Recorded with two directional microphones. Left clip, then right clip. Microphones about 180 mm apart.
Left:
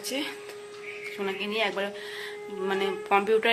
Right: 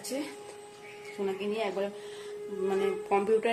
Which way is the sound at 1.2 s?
Centre (ahead or behind).